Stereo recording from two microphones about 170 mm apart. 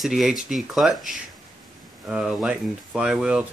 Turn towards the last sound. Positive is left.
turn(degrees=-5)  # may be behind; listen again after turning